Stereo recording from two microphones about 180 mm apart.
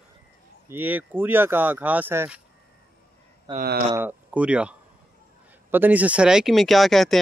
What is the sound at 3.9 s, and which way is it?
Speech, 10° right (ahead or behind).